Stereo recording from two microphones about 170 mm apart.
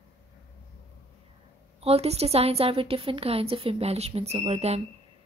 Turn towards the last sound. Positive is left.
turn(degrees=-35)  # may be behind; listen again after turning